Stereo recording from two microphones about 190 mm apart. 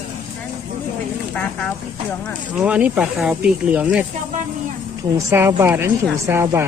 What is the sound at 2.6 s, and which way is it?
Speech, 5° right (ahead or behind).